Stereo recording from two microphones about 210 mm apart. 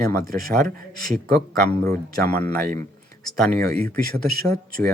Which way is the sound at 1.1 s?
35° right (ahead or behind).